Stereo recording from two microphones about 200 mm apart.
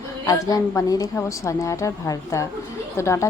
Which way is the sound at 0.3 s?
15° left (ahead or behind).